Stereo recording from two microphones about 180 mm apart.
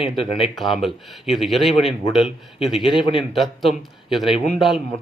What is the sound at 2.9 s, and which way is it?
Speech, 30° left (ahead or behind).